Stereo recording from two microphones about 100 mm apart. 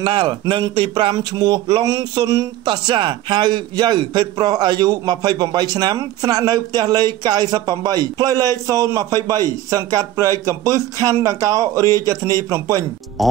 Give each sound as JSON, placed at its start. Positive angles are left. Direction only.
{"t": 0.0, "sound": "speech", "side_deg": -50}
{"t": 1.9, "sound": "a man's voice", "side_deg": -35}
{"t": 2.6, "sound": "a man's voice", "side_deg": -50}
{"t": 13.2, "sound": "speech", "side_deg": 0}